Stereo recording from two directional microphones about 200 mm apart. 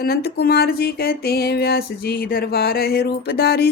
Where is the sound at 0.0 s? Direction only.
50° left (ahead or behind).